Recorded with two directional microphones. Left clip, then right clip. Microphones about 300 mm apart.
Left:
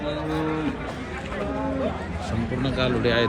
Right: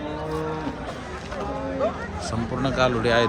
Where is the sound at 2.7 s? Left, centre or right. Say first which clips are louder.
Right 2 dB; centre.